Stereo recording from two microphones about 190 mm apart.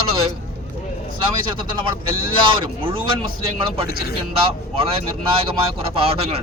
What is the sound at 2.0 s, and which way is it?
Speech, 25° right (ahead or behind).